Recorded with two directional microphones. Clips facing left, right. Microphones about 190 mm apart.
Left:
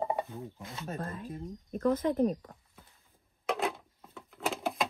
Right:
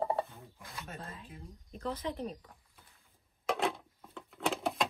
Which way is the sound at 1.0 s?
55° left (ahead or behind).